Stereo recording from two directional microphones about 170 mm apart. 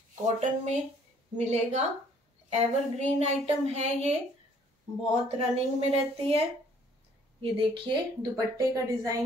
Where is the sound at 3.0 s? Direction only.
40° right (ahead or behind).